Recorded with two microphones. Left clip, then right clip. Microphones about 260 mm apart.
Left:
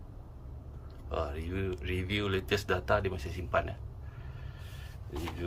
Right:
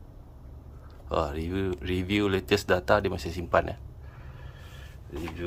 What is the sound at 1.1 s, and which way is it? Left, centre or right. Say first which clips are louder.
Speech: right 7 dB; right.